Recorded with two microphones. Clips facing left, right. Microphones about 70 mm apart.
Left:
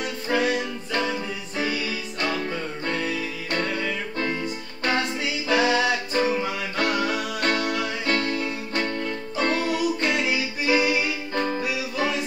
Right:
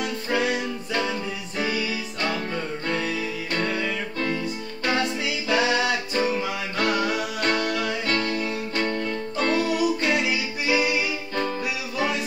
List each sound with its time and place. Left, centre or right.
0.3 s music: centre
3.5 s music: centre
5.5 s music: centre